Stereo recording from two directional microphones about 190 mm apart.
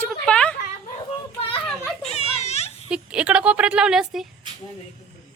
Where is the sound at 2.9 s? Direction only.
5° right (ahead or behind).